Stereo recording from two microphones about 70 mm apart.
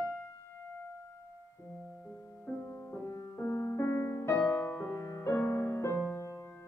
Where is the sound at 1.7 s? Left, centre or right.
Centre.